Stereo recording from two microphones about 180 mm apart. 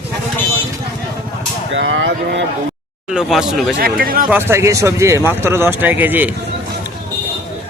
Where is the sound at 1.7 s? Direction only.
85° right.